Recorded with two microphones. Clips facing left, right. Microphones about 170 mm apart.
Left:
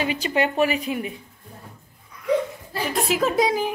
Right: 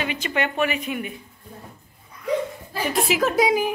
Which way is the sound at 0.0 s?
35° left (ahead or behind).